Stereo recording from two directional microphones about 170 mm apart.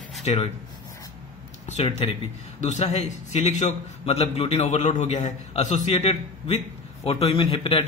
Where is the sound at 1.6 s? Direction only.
40° left (ahead or behind).